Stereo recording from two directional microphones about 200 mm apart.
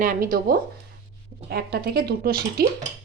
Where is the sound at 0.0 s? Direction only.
45° right (ahead or behind).